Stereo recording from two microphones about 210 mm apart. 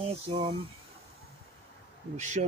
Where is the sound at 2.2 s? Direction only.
35° right (ahead or behind).